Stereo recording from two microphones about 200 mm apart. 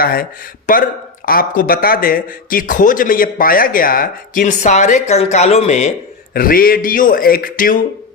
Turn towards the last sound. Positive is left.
turn(degrees=45)  # may be behind; listen again after turning